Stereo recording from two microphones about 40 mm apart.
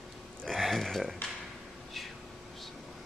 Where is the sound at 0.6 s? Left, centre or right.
Centre.